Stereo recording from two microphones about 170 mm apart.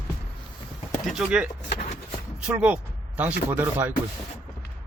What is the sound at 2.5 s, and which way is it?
Speech, 5° right (ahead or behind).